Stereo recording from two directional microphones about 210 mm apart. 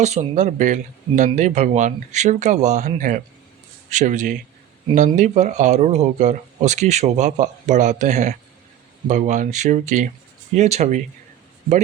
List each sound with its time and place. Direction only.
0.0 s speech: 30° right (ahead or behind)